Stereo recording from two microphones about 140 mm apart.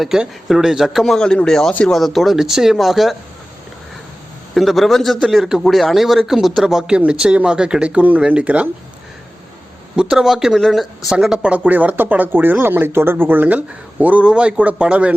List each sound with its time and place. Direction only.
0.0 s a man's voice: 5° right (ahead or behind)
4.5 s a man's voice: centre (ahead or behind)
9.9 s speech: 5° right (ahead or behind)